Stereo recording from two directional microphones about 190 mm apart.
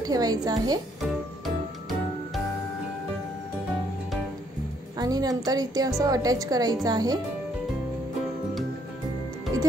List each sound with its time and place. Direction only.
0.0 s a woman's voice: 20° right (ahead or behind)
4.9 s a woman's voice: 20° right (ahead or behind)